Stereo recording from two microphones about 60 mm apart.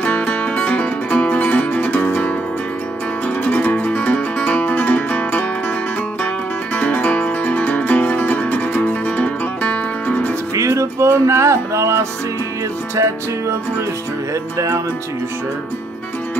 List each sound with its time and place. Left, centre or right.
0.0 s music: left
6.7 s music: left
10.5 s music: right